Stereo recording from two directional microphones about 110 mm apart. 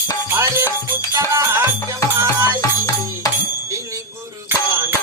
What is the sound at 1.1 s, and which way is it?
Music, 25° right (ahead or behind).